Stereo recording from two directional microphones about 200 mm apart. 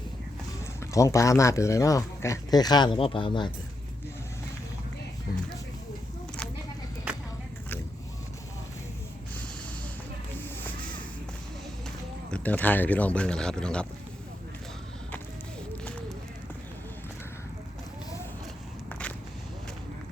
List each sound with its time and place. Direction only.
0.9 s speech: 15° left (ahead or behind)
12.3 s speech: 5° left (ahead or behind)
15.8 s a sound: 5° left (ahead or behind)